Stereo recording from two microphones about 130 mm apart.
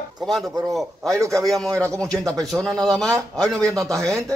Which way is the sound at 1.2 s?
25° right (ahead or behind).